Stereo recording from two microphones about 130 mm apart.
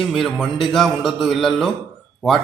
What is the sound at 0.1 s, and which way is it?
A man's voice, centre (ahead or behind).